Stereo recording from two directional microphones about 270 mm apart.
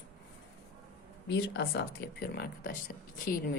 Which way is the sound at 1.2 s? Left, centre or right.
Left.